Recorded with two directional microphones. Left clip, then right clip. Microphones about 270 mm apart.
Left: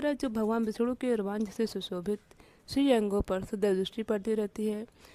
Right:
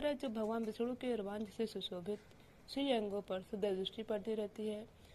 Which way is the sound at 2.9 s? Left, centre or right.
Left.